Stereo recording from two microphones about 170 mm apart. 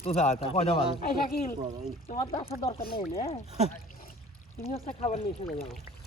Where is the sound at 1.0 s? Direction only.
55° left (ahead or behind).